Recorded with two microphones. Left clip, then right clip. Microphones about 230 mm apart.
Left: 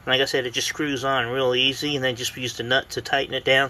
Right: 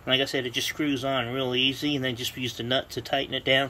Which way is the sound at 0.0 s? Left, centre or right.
Centre.